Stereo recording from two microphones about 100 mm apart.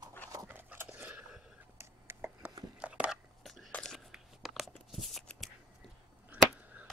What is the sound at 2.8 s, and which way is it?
Chopping, 10° right (ahead or behind).